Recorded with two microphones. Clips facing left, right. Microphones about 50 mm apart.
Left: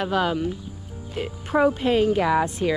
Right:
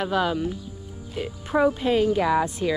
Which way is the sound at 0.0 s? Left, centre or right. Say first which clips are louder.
Left 1 dB; left.